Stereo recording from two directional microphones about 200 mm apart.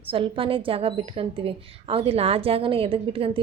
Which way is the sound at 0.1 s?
25° right (ahead or behind).